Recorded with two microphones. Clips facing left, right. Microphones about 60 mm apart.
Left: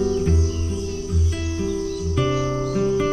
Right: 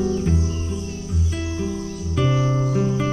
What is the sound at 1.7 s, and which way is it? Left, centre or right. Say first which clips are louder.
Music: left 4 dB; right.